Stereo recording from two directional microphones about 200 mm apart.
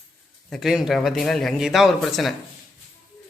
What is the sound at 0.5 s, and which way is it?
Speech, centre (ahead or behind).